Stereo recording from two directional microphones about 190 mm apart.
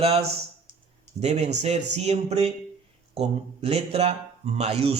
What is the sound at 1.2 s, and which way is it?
A man's voice, 35° right (ahead or behind).